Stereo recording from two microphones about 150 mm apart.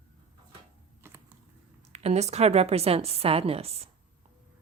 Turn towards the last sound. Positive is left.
turn(degrees=-40)  # may be behind; listen again after turning